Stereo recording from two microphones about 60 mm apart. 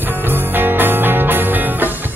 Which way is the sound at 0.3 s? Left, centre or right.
Right.